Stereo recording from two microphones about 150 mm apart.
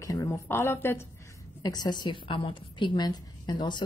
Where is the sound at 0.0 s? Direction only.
25° left (ahead or behind).